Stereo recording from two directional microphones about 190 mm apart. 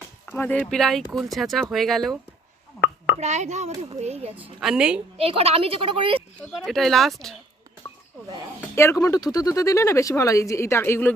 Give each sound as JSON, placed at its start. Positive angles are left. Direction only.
{"t": 0.3, "sound": "speech", "side_deg": 10}
{"t": 3.2, "sound": "a child's voice", "side_deg": -35}
{"t": 4.6, "sound": "speech", "side_deg": -5}
{"t": 5.1, "sound": "a woman's voice", "side_deg": -30}
{"t": 6.7, "sound": "speech", "side_deg": 0}
{"t": 8.7, "sound": "speech", "side_deg": 15}